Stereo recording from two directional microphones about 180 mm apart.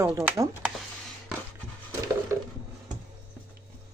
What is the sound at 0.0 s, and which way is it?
Speech, 15° right (ahead or behind).